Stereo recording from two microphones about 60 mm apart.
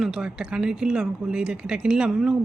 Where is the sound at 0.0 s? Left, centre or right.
Centre.